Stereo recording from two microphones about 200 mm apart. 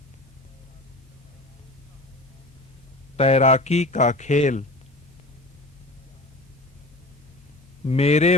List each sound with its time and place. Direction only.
3.2 s speech: 30° left (ahead or behind)
7.9 s speech: 30° left (ahead or behind)